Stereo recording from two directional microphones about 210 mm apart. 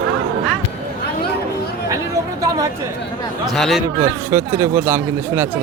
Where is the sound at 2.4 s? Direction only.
15° right (ahead or behind).